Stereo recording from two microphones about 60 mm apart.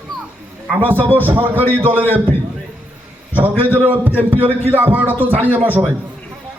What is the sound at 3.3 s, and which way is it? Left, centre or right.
A man's voice, right.